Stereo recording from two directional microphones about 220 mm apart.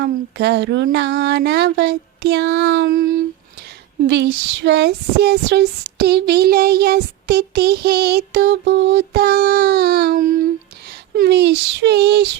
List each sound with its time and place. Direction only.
0.0 s speech: 45° right (ahead or behind)